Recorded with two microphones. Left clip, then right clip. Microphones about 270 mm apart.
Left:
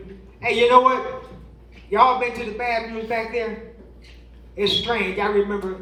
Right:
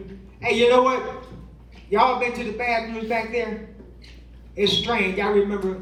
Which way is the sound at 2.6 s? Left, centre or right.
Centre.